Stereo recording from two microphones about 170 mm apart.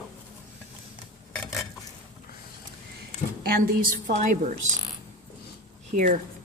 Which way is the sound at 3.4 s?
60° right (ahead or behind).